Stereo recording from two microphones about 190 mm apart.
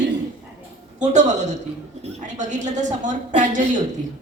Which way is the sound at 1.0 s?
40° right (ahead or behind).